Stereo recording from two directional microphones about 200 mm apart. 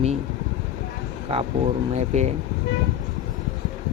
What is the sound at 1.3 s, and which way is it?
A man's voice, 30° right (ahead or behind).